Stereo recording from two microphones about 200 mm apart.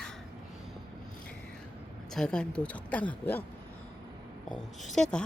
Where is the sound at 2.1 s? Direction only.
5° left (ahead or behind).